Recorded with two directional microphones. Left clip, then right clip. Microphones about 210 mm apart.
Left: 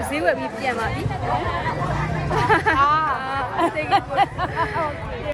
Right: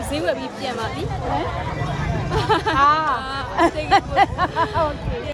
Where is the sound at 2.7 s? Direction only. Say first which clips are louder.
Right 2 dB; 45° right (ahead or behind).